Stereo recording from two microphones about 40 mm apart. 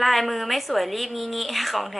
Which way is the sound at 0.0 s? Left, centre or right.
Centre.